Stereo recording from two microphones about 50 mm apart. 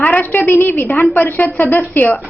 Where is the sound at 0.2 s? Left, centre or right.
Left.